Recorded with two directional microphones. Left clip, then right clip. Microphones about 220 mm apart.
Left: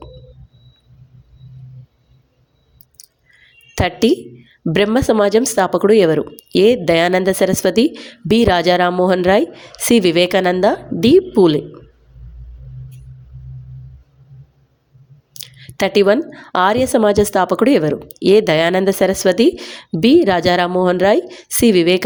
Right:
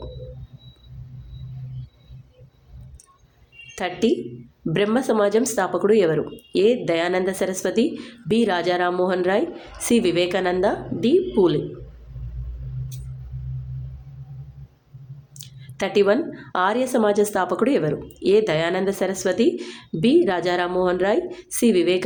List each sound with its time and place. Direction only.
3.8 s speech: 40° left (ahead or behind)
15.3 s speech: 35° left (ahead or behind)